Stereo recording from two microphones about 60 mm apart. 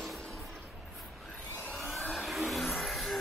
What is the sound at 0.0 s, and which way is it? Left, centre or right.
Music, centre.